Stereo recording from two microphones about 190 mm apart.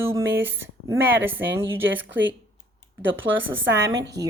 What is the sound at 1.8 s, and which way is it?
A woman's voice, 80° right.